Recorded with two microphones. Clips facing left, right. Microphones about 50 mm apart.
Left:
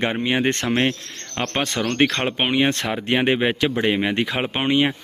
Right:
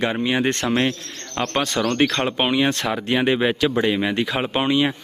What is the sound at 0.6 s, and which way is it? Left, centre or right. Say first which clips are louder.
Speech: even; centre.